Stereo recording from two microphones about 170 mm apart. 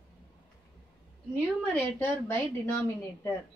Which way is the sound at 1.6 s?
10° left (ahead or behind).